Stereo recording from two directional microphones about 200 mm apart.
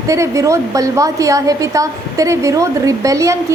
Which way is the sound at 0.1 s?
15° right (ahead or behind).